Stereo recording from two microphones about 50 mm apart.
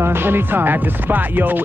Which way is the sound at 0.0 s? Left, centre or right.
Right.